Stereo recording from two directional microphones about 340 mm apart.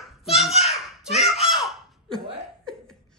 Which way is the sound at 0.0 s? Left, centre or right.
Centre.